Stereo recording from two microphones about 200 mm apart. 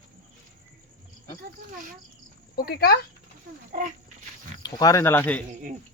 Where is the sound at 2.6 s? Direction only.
50° left (ahead or behind).